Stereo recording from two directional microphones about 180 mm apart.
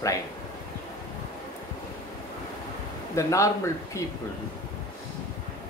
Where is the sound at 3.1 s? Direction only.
15° left (ahead or behind).